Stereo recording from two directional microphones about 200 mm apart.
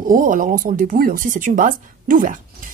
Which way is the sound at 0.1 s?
40° right (ahead or behind).